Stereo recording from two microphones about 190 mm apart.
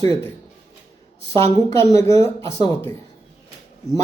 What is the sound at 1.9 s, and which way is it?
Speech, 15° left (ahead or behind).